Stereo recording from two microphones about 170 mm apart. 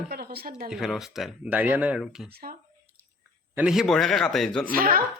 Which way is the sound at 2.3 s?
60° right (ahead or behind).